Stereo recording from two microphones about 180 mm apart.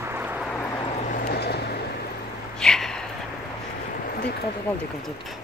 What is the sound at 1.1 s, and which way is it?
Vehicle, 45° left (ahead or behind).